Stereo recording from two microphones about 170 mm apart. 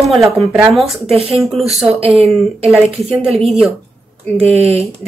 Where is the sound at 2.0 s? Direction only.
35° right (ahead or behind).